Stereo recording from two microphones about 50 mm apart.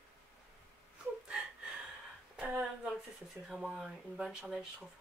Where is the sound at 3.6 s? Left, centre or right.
Centre.